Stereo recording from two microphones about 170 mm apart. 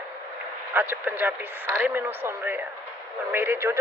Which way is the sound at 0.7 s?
10° right (ahead or behind).